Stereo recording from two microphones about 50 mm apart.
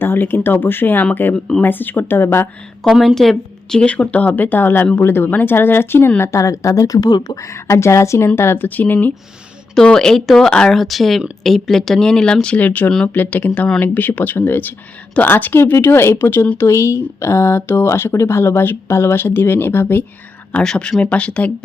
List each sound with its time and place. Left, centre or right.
0.0 s speech: left
2.8 s a woman's voice: centre
3.8 s speech: left
6.1 s a woman's voice: left
7.4 s speech: left
8.4 s speech: left
8.6 s speech: left
9.8 s speech: centre
10.7 s speech: centre
12.5 s speech: left
16.0 s speech: left
16.6 s speech: left
18.1 s speech: left
20.5 s speech: centre